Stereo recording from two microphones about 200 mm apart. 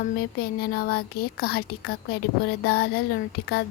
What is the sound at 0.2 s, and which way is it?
A woman's voice, 50° left (ahead or behind).